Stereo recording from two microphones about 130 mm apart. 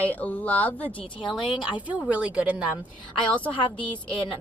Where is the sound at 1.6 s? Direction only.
10° right (ahead or behind).